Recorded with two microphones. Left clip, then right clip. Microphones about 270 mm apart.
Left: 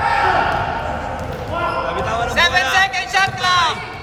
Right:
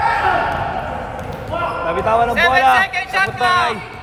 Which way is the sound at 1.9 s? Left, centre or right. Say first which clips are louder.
Right 5 dB; right.